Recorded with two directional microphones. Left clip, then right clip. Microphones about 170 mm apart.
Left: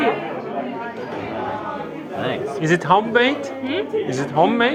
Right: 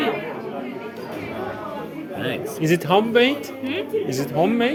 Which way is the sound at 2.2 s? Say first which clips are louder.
Left 2 dB; 50° right (ahead or behind).